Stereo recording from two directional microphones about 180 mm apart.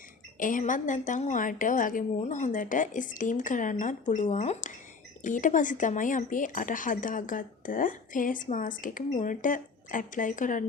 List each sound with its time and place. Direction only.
0.3 s a woman's voice: 45° left (ahead or behind)